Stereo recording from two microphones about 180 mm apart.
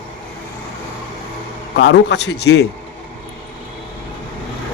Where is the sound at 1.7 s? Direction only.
70° left (ahead or behind).